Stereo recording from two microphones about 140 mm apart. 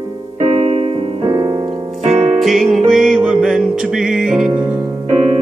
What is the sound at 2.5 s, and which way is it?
Music, centre (ahead or behind).